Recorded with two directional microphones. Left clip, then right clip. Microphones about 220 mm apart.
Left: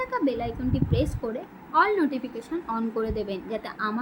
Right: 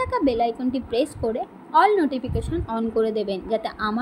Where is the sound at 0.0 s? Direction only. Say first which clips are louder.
Right 6 dB; 10° right (ahead or behind).